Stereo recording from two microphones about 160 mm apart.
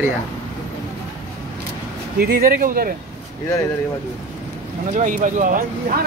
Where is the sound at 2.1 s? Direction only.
70° right (ahead or behind).